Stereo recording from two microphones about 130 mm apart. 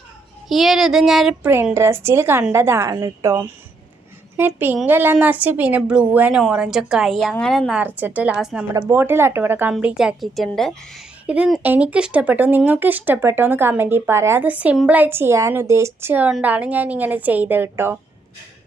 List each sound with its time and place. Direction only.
0.4 s a woman's voice: centre (ahead or behind)
1.4 s a woman's voice: 15° right (ahead or behind)
4.4 s a woman's voice: 15° right (ahead or behind); by 7.7 s 5° left (ahead or behind)
7.7 s speech: 10° right (ahead or behind)
8.7 s a woman's voice: 15° right (ahead or behind)